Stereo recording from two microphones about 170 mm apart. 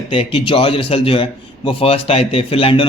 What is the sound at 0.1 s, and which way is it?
Speech, 35° left (ahead or behind).